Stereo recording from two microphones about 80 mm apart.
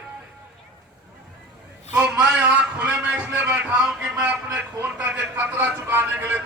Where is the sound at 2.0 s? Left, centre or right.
Centre.